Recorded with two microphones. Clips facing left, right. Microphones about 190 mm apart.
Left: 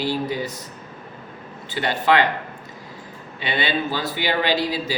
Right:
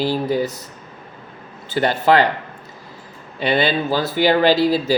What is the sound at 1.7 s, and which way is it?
Speech, 40° right (ahead or behind).